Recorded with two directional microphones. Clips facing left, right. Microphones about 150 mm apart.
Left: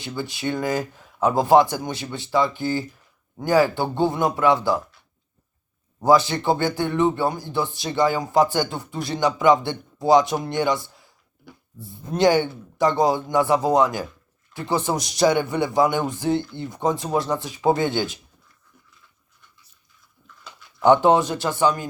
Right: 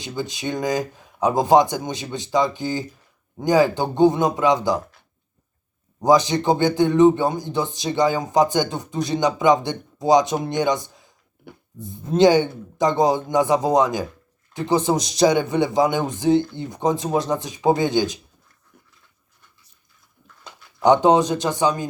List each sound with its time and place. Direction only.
0.0 s speech: 20° right (ahead or behind)
6.0 s speech: 20° right (ahead or behind)
20.8 s speech: 20° right (ahead or behind)